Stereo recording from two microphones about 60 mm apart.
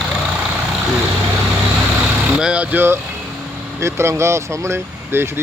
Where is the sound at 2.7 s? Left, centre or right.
Right.